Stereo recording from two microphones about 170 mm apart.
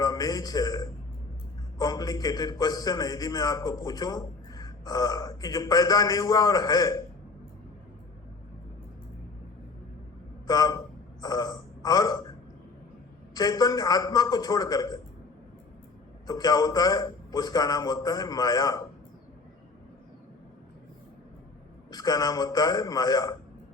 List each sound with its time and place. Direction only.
0.0 s a man's voice: 20° left (ahead or behind)
10.4 s a man's voice: 20° left (ahead or behind)
13.3 s a man's voice: 20° left (ahead or behind)
16.2 s a man's voice: 20° left (ahead or behind)
21.8 s a man's voice: 25° left (ahead or behind)